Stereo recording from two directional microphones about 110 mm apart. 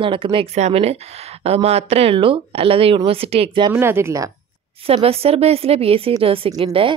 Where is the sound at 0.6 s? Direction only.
80° right.